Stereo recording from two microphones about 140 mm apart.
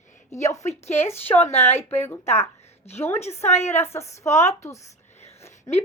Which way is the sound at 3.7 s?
15° left (ahead or behind).